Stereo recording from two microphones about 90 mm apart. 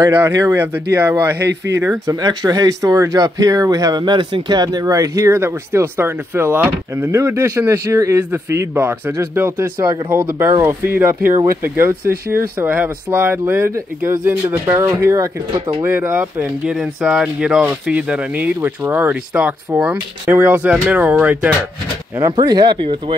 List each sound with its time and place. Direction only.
0.3 s speech: 35° right (ahead or behind)
0.6 s speech: 25° right (ahead or behind)
2.0 s speech: 45° right (ahead or behind)
14.2 s speech: 25° right (ahead or behind)
14.9 s speech: 40° right (ahead or behind)
15.8 s speech: 25° right (ahead or behind)
16.6 s speech: 5° right (ahead or behind)
22.4 s speech: 50° right (ahead or behind); by 23.1 s 70° right (ahead or behind)